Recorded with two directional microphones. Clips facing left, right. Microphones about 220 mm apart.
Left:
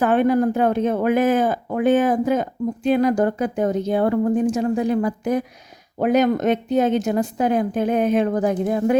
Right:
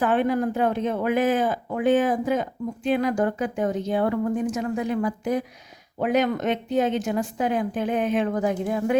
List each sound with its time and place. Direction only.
0.0 s a woman's voice: 45° left (ahead or behind)